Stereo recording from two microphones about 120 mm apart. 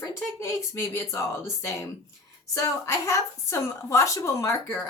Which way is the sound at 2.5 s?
25° left (ahead or behind).